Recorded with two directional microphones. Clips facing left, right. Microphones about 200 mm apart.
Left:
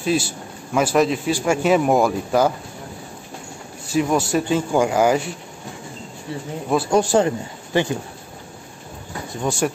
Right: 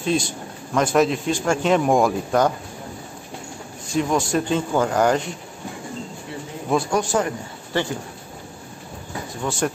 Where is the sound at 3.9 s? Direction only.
5° left (ahead or behind).